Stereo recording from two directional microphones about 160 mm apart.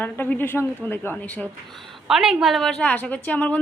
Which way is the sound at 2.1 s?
Centre (ahead or behind).